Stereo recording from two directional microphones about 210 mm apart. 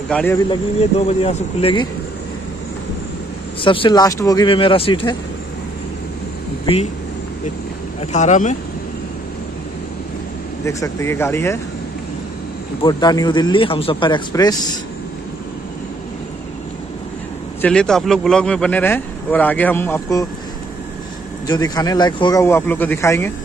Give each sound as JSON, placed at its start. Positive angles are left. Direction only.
{"t": 0.1, "sound": "a man's voice", "side_deg": 5}
{"t": 0.5, "sound": "speech", "side_deg": 30}
{"t": 3.6, "sound": "speech", "side_deg": 25}
{"t": 6.6, "sound": "speech", "side_deg": 25}
{"t": 8.0, "sound": "speech", "side_deg": 35}
{"t": 10.6, "sound": "a man's voice", "side_deg": 15}
{"t": 12.8, "sound": "speech", "side_deg": 20}
{"t": 17.6, "sound": "a man's voice", "side_deg": 5}
{"t": 21.5, "sound": "a man's voice", "side_deg": 20}